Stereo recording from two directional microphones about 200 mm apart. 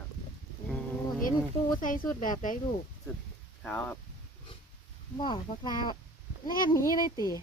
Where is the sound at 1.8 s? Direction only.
40° left (ahead or behind).